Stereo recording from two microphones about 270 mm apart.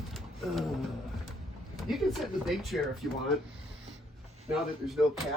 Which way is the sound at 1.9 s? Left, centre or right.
Centre.